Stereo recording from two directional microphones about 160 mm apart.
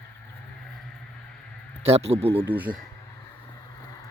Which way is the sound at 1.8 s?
40° right (ahead or behind).